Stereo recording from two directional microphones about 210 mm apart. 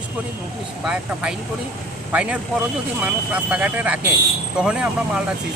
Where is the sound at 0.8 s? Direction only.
5° right (ahead or behind).